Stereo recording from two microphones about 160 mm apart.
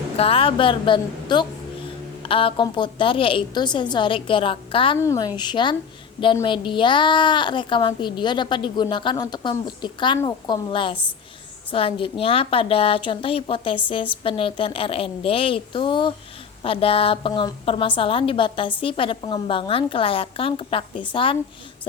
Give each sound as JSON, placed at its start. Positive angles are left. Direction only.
{"t": 0.2, "sound": "a woman's voice", "side_deg": 35}
{"t": 4.9, "sound": "a woman's voice", "side_deg": 20}